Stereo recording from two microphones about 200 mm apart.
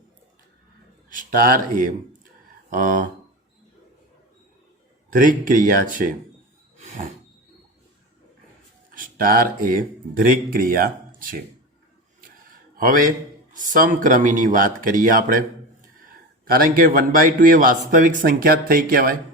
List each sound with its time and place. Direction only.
1.1 s a man's voice: 45° right (ahead or behind)
5.1 s a man's voice: 45° right (ahead or behind)
6.7 s a sound: 40° right (ahead or behind)
8.9 s a man's voice: 45° right (ahead or behind)
12.7 s a man's voice: 45° right (ahead or behind)
16.5 s a man's voice: 45° right (ahead or behind)